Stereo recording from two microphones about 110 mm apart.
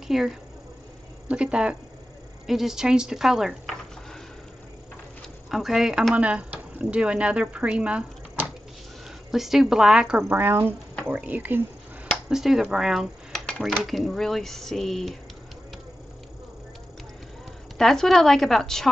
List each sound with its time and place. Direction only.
0.1 s speech: centre (ahead or behind)
5.5 s speech: centre (ahead or behind)
12.3 s speech: 5° right (ahead or behind)
17.7 s speech: centre (ahead or behind)